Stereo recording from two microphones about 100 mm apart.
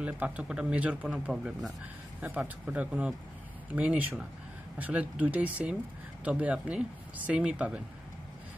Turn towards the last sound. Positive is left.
turn(degrees=-10)  # may be behind; listen again after turning